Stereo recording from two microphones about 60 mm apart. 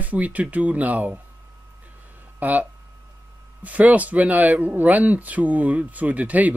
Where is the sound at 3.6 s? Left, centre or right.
Right.